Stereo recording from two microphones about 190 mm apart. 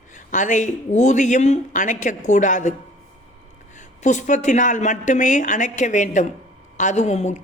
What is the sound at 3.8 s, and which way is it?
Speech, 40° left (ahead or behind).